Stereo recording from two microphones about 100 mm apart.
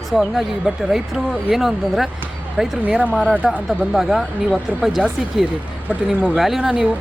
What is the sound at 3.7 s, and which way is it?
Speech, centre (ahead or behind).